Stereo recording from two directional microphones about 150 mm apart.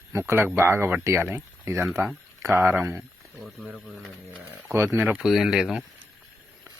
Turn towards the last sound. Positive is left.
turn(degrees=0)  # may be behind; listen again after turning